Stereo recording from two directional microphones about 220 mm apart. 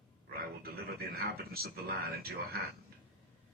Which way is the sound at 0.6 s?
45° right (ahead or behind).